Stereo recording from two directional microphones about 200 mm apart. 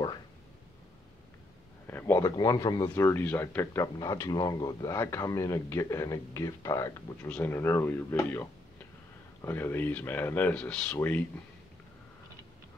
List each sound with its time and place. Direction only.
1.9 s a man's voice: 10° left (ahead or behind)